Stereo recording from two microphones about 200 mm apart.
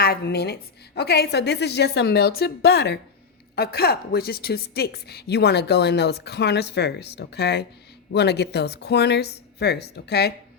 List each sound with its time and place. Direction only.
0.0 s a woman's voice: 50° left (ahead or behind)